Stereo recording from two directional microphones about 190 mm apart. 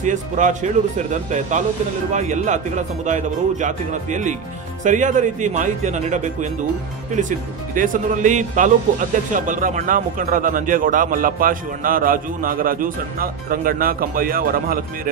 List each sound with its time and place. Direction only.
0.0 s speech: 40° right (ahead or behind)